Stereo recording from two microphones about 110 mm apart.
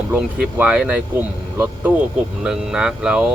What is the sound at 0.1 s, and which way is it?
Speech, 10° right (ahead or behind).